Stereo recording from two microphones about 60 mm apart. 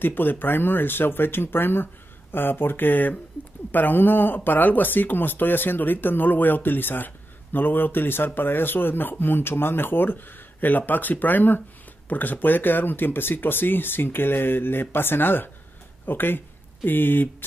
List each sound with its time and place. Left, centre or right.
0.0 s speech: left